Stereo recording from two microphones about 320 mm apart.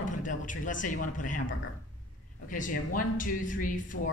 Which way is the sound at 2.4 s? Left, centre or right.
Left.